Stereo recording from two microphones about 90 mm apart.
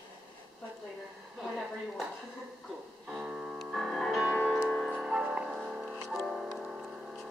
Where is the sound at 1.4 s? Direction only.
Centre (ahead or behind).